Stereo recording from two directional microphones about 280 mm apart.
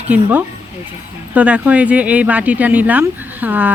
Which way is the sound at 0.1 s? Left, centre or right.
Centre.